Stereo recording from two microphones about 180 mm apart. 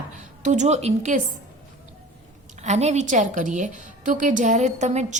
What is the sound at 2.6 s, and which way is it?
A woman's voice, 40° right (ahead or behind).